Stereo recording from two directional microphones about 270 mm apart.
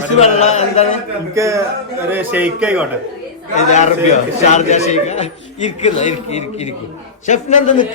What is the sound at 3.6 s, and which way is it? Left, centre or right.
A man's voice, left.